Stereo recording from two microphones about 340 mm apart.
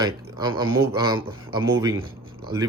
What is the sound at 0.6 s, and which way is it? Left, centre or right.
Speech, centre.